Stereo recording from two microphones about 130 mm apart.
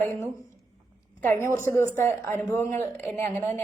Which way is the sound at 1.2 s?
15° left (ahead or behind).